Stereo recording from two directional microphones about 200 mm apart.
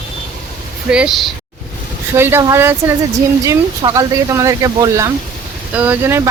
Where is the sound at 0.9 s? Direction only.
5° right (ahead or behind).